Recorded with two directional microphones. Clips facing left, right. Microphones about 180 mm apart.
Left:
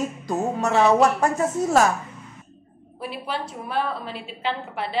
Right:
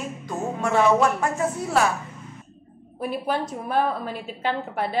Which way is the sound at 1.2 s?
40° left (ahead or behind).